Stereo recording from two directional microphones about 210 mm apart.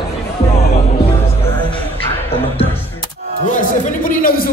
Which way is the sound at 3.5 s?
40° left (ahead or behind).